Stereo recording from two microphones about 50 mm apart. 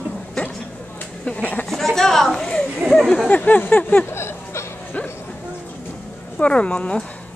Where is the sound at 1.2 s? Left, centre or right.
Left.